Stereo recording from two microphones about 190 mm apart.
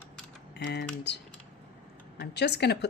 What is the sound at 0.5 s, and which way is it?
Speech, 65° left (ahead or behind).